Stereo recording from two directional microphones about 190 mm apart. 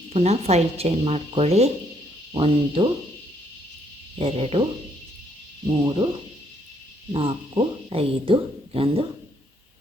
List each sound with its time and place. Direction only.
0.1 s speech: 35° right (ahead or behind)
4.2 s speech: 30° right (ahead or behind)
5.8 s speech: 25° right (ahead or behind)
7.1 s speech: 30° right (ahead or behind)